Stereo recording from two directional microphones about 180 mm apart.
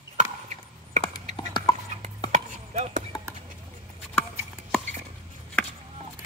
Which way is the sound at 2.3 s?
40° right (ahead or behind).